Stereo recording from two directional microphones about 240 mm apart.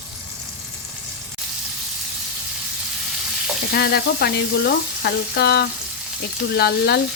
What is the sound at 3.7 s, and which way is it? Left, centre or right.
Frying, left.